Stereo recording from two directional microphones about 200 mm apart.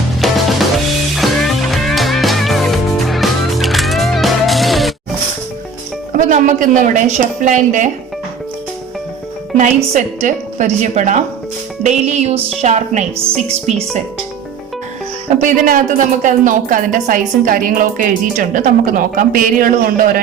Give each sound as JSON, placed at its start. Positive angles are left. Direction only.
{"t": 0.2, "sound": "drum", "side_deg": 0}
{"t": 1.1, "sound": "music", "side_deg": 0}
{"t": 6.1, "sound": "a woman's voice", "side_deg": -40}
{"t": 9.6, "sound": "a woman's voice", "side_deg": -35}
{"t": 15.4, "sound": "a woman's voice", "side_deg": -40}